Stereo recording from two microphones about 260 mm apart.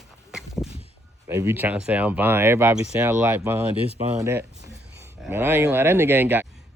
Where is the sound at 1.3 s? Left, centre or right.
Centre.